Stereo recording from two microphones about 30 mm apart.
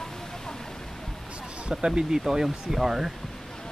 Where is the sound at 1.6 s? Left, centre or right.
Right.